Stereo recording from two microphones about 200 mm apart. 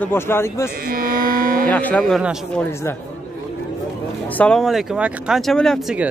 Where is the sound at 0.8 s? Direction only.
45° right (ahead or behind).